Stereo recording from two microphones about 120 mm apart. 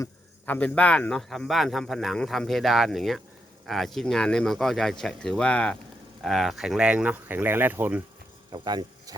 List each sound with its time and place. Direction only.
0.4 s speech: 15° left (ahead or behind); by 8.0 s 15° right (ahead or behind)
8.5 s speech: 40° right (ahead or behind)